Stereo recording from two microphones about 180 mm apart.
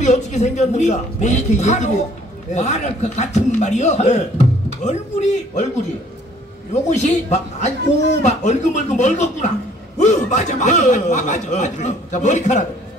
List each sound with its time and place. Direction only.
0.0 s a man's voice: 40° left (ahead or behind)
6.7 s a man's voice: 40° left (ahead or behind)